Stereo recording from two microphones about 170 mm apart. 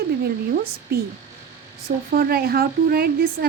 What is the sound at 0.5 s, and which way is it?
Speech, 65° right (ahead or behind).